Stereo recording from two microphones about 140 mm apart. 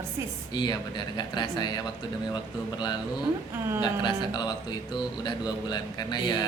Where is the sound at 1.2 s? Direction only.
30° left (ahead or behind).